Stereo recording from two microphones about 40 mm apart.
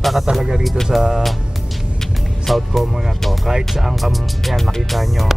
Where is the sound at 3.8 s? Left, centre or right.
Centre.